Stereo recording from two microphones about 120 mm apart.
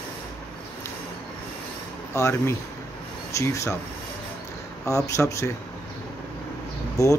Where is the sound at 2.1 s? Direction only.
25° left (ahead or behind).